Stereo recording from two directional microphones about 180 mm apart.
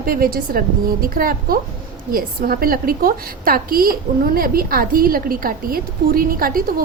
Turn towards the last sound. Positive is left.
turn(degrees=-50)  # may be behind; listen again after turning